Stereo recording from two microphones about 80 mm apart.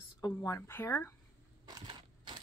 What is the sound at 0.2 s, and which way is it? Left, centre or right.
Speech, left.